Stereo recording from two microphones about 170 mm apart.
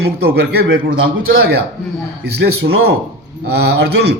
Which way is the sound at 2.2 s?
75° right (ahead or behind).